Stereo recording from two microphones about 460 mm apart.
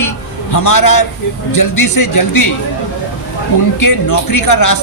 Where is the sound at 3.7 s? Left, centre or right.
Left.